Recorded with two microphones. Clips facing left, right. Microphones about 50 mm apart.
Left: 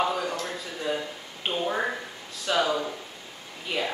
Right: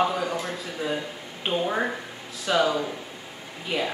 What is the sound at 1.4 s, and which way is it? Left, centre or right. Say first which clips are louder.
A man's voice: right 2 dB; centre.